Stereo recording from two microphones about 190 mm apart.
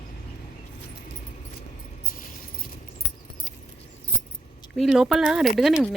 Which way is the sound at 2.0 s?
50° left (ahead or behind).